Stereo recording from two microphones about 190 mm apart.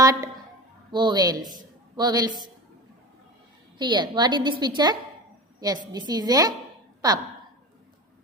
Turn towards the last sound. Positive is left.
turn(degrees=-20)  # may be behind; listen again after turning